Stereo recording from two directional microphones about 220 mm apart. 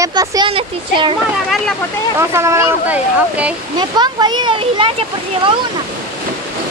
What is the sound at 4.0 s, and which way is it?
Speech, 20° right (ahead or behind).